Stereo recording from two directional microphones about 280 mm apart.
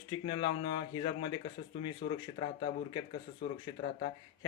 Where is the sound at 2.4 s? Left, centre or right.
Centre.